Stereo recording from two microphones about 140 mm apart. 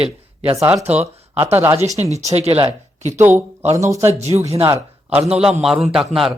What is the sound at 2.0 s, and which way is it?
Speech, 50° right (ahead or behind).